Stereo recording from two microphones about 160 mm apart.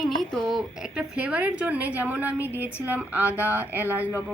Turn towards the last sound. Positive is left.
turn(degrees=-10)  # may be behind; listen again after turning